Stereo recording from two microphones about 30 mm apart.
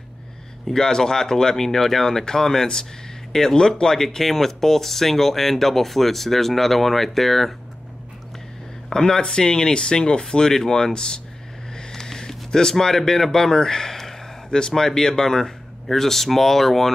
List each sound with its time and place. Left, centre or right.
0.7 s speech: centre
8.9 s speech: left
11.9 s a sound: centre
12.4 s speech: centre